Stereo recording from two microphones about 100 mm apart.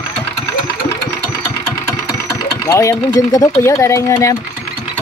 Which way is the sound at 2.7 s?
30° left (ahead or behind).